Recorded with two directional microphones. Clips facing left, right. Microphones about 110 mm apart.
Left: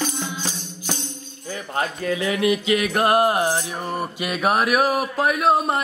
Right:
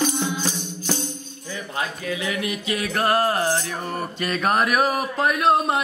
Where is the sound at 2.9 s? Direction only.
20° left (ahead or behind).